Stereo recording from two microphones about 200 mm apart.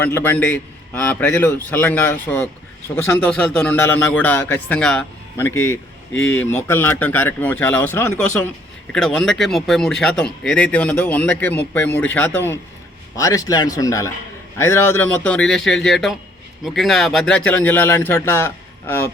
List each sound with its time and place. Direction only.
0.0 s a man's voice: 10° left (ahead or behind)